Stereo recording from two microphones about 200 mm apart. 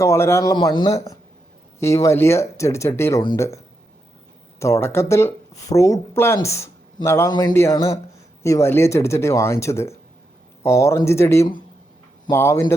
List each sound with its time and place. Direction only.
0.0 s speech: 15° left (ahead or behind)
4.6 s speech: 15° left (ahead or behind)